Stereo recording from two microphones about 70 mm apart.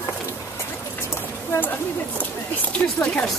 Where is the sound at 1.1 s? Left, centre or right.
Left.